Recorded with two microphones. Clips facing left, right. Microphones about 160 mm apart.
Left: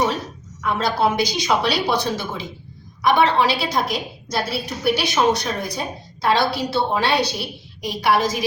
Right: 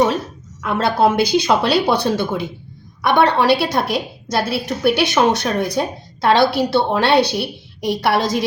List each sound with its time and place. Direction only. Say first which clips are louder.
0.6 s a woman's voice: right 4 dB; 60° right (ahead or behind)